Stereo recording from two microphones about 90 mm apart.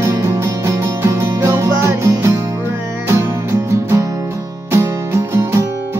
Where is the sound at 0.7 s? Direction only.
30° right (ahead or behind).